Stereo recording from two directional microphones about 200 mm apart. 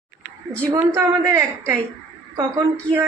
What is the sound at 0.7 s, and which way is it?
Speech, 15° right (ahead or behind).